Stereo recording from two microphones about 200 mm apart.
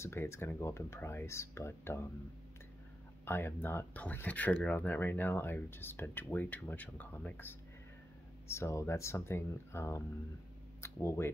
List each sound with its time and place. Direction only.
0.0 s speech: 15° left (ahead or behind)
3.3 s speech: 10° left (ahead or behind)